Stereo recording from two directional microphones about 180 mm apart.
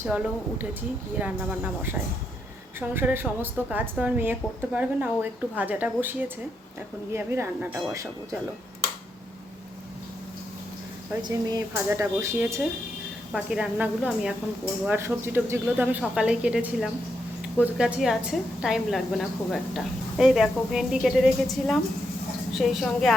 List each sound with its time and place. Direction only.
0.6 s a woman's voice: 10° right (ahead or behind)
11.3 s a woman's voice: 20° right (ahead or behind)
13.3 s a woman's voice: 5° right (ahead or behind)